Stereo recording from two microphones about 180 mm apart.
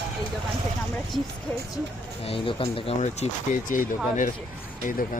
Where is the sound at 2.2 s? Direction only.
30° left (ahead or behind).